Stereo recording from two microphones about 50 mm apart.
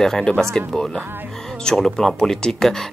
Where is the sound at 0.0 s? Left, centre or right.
Centre.